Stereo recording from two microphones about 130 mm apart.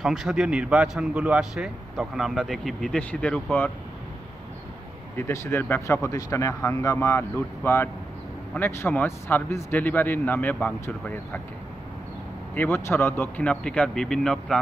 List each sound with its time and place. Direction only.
0.0 s speech: 5° right (ahead or behind)
5.1 s speech: 20° left (ahead or behind)
12.5 s speech: 15° left (ahead or behind)